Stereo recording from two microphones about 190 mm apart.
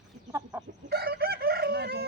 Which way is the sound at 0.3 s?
15° right (ahead or behind).